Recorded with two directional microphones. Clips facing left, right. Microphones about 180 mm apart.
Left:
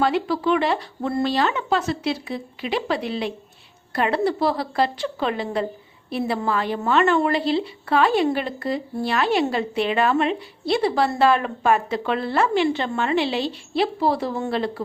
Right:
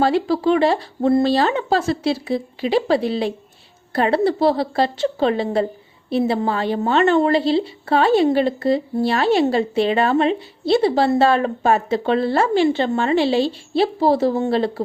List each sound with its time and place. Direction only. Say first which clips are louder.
0.0 s a woman's voice: right 4 dB; 30° right (ahead or behind)